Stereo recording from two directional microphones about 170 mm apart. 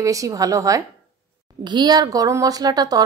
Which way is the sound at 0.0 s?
20° right (ahead or behind).